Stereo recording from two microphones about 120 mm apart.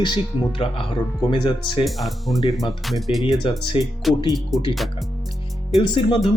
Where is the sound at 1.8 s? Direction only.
Centre (ahead or behind).